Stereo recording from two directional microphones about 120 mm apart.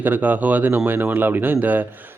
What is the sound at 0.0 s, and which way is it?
A man's voice, 15° right (ahead or behind).